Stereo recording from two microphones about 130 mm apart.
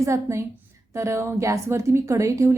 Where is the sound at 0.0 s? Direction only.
20° right (ahead or behind).